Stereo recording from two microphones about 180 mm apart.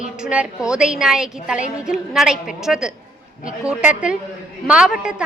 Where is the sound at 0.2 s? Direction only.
5° right (ahead or behind).